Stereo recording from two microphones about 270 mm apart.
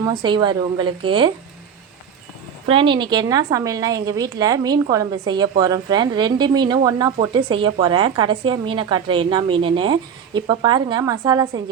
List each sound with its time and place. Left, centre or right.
0.0 s a woman's voice: centre
2.6 s a woman's voice: centre